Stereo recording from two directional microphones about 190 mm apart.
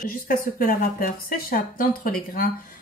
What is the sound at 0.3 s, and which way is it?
Speech, 45° left (ahead or behind).